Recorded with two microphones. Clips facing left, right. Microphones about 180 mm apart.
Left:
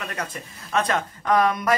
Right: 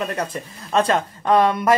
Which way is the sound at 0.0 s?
30° right (ahead or behind).